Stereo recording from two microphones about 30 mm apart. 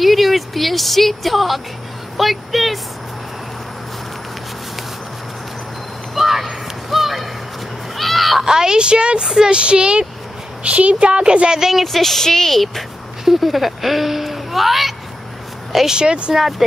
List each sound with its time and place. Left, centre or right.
0.0 s a sound: centre
6.1 s a sound: centre
8.4 s a woman's voice: right
9.2 s a woman's voice: right
9.5 s speech: right
10.6 s speech: right
11.8 s speech: centre
13.2 s speech: centre
15.9 s a woman's voice: right
16.3 s speech: centre